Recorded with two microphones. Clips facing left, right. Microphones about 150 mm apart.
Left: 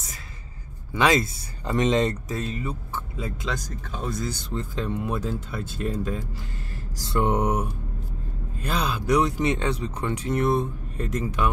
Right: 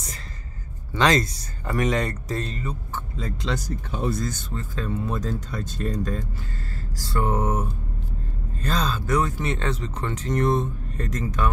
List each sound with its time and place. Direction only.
0.9 s speech: 10° left (ahead or behind)
1.7 s speech: 25° left (ahead or behind)
2.2 s speech: 5° left (ahead or behind)
3.5 s speech: 5° right (ahead or behind)
4.3 s speech: 15° left (ahead or behind)
7.0 s speech: 20° left (ahead or behind)